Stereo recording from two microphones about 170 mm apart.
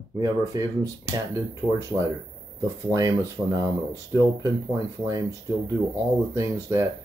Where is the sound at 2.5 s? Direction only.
20° right (ahead or behind).